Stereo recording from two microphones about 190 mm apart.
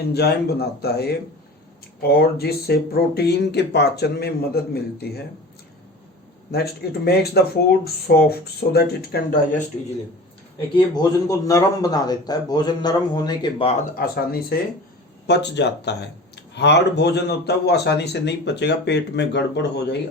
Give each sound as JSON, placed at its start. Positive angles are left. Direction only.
{"t": 0.1, "sound": "speech", "side_deg": 55}
{"t": 6.5, "sound": "speech", "side_deg": 55}
{"t": 10.8, "sound": "a man's voice", "side_deg": 20}
{"t": 15.3, "sound": "speech", "side_deg": 65}